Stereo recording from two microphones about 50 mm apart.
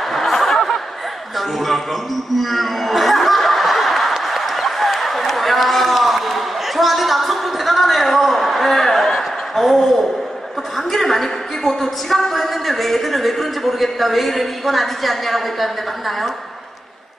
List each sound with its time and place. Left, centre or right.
0.1 s a sound: centre
2.3 s snicker: centre
10.9 s a woman's voice: centre